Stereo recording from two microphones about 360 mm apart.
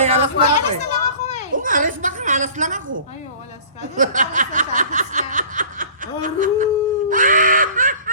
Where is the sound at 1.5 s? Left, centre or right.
Right.